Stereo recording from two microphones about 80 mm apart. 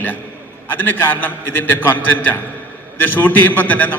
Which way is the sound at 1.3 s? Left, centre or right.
Left.